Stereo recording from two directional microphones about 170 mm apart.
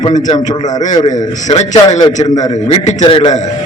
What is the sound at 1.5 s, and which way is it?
Speech, 30° left (ahead or behind).